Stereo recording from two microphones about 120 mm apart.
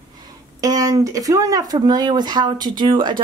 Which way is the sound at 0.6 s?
30° right (ahead or behind).